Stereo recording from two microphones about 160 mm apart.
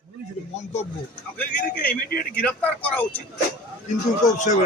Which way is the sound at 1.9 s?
65° left (ahead or behind).